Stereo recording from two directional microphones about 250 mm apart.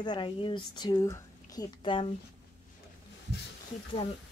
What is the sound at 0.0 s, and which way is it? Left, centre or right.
Speech, centre.